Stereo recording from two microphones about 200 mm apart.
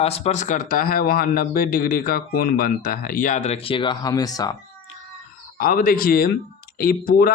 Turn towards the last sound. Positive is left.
turn(degrees=45)  # may be behind; listen again after turning